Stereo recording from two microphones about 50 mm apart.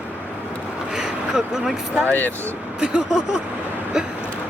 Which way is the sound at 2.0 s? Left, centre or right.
Left.